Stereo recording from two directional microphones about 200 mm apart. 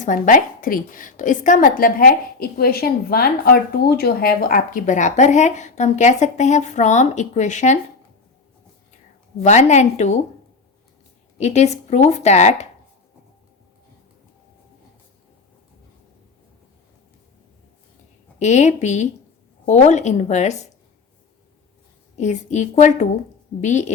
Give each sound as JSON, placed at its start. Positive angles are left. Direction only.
{"t": 0.0, "sound": "a woman's voice", "side_deg": 40}
{"t": 9.4, "sound": "a woman's voice", "side_deg": 35}
{"t": 11.3, "sound": "a woman's voice", "side_deg": 35}
{"t": 18.3, "sound": "a woman's voice", "side_deg": 35}
{"t": 22.2, "sound": "a woman's voice", "side_deg": 35}